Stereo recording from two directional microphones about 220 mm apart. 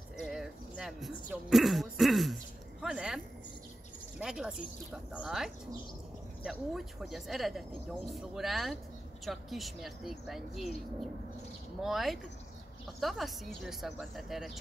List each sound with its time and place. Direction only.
0.2 s a sound: 5° right (ahead or behind)
1.3 s speech: centre (ahead or behind)
4.2 s speech: 5° right (ahead or behind)
11.8 s speech: centre (ahead or behind)